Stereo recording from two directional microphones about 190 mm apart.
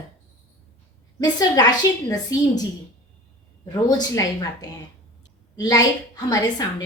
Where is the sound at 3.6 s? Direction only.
20° left (ahead or behind).